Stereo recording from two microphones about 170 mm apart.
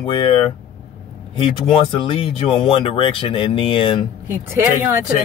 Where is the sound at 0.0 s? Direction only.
35° left (ahead or behind).